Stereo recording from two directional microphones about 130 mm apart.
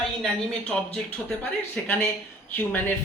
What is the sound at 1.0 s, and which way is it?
Speech, 15° left (ahead or behind).